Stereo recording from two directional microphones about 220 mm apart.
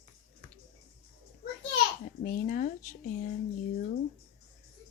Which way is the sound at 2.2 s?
40° left (ahead or behind).